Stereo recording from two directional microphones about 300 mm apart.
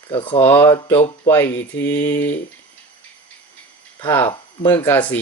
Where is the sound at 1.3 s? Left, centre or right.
Centre.